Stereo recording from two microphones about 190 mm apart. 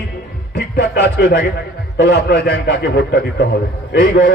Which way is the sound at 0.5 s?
60° left (ahead or behind).